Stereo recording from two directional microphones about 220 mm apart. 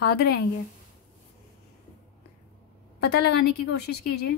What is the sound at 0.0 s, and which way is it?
Speech, 45° left (ahead or behind).